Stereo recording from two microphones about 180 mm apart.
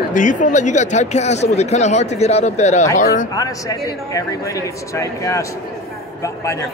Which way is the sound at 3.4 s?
20° left (ahead or behind).